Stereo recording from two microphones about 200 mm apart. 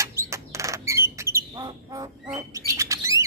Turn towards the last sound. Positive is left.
turn(degrees=-15)  # may be behind; listen again after turning